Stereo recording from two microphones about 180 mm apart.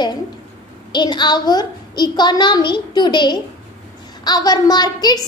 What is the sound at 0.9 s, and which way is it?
A child's voice, 25° left (ahead or behind).